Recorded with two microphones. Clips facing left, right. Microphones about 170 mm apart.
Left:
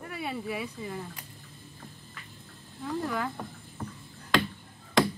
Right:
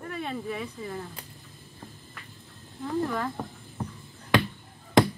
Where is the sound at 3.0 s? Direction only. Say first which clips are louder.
Right 1 dB; 5° left (ahead or behind).